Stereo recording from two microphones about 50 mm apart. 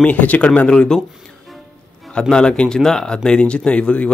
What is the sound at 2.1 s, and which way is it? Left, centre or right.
Speech, centre.